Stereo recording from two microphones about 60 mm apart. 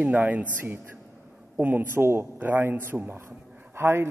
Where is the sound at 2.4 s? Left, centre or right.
Right.